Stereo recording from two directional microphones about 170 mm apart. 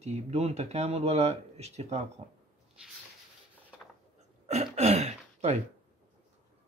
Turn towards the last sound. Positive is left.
turn(degrees=-40)  # may be behind; listen again after turning